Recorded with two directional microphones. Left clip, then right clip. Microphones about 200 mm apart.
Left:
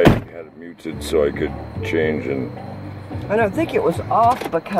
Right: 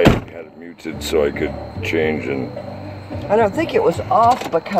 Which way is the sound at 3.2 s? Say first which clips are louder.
Right 3 dB; 25° left (ahead or behind).